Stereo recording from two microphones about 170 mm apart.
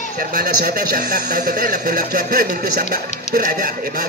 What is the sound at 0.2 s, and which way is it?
A man's voice, 55° right (ahead or behind).